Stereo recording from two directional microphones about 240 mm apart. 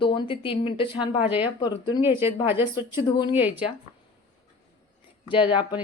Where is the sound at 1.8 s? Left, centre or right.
Centre.